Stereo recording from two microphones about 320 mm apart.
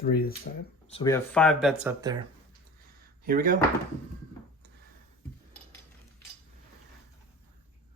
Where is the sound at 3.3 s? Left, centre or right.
Right.